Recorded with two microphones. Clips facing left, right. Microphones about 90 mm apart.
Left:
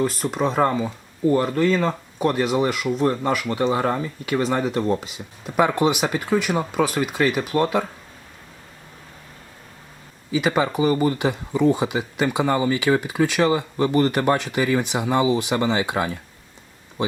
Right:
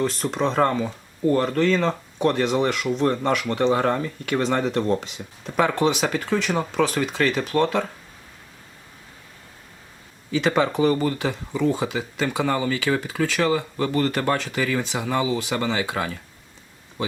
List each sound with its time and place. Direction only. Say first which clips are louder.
0.0 s speech: left 1 dB; 5° left (ahead or behind)
10.3 s speech: even; 5° left (ahead or behind)
11.0 s speech: left 3 dB; 15° left (ahead or behind)